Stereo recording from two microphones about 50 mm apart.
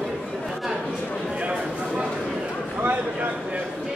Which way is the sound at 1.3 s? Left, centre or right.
Right.